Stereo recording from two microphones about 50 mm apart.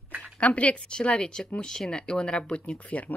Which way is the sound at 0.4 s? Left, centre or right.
Left.